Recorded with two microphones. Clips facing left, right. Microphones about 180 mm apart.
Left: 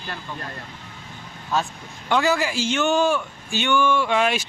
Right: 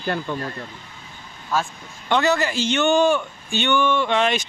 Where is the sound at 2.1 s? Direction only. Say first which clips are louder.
Right 1 dB; 5° left (ahead or behind).